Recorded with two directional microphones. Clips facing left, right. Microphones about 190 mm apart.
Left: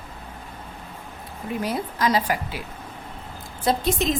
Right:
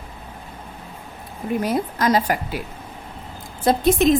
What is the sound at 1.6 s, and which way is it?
A woman's voice, 50° right (ahead or behind).